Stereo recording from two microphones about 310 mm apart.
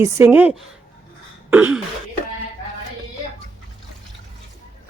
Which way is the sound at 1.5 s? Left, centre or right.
Centre.